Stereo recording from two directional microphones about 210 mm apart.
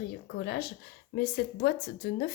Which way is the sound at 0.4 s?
50° left (ahead or behind).